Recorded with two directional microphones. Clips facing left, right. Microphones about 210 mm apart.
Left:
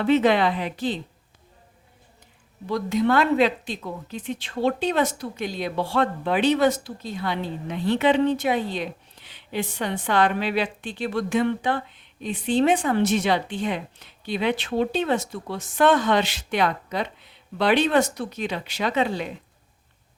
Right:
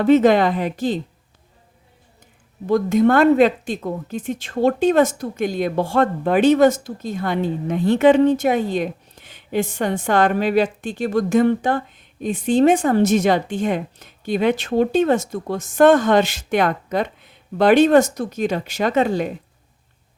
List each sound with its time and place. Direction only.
0.0 s a woman's voice: 45° right (ahead or behind)
2.6 s a woman's voice: 50° right (ahead or behind)